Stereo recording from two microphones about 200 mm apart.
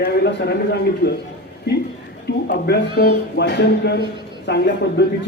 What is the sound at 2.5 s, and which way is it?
A man's voice, 55° left (ahead or behind).